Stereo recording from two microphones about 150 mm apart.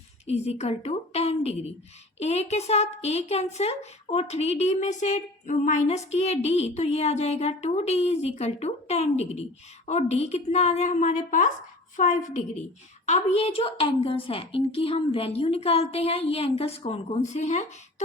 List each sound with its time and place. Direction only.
0.3 s a woman's voice: 45° left (ahead or behind)